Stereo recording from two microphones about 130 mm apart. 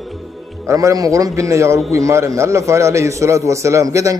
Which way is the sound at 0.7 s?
25° right (ahead or behind).